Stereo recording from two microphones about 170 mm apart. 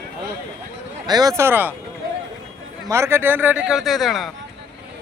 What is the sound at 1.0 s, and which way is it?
Speech, 25° right (ahead or behind).